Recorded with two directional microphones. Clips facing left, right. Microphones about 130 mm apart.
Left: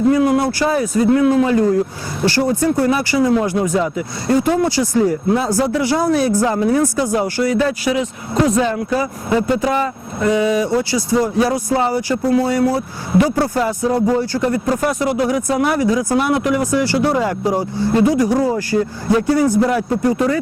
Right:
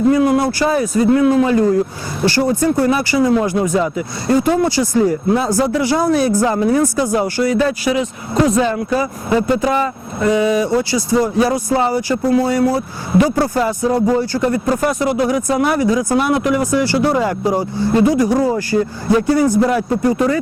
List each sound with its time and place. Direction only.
0.1 s speech: 25° right (ahead or behind)